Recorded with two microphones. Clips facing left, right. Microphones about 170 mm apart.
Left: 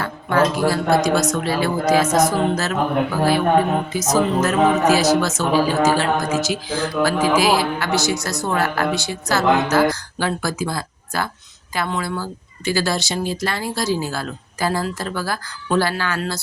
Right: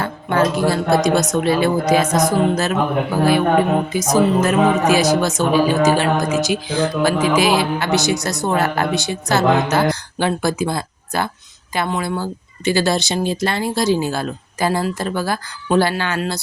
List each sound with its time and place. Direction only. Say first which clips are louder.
0.0 s a sound: right 1 dB; 25° right (ahead or behind)
0.7 s speech: right 2 dB; 25° right (ahead or behind)
2.1 s music: right 1 dB; 15° right (ahead or behind)
3.9 s speech: right 3 dB; 15° right (ahead or behind)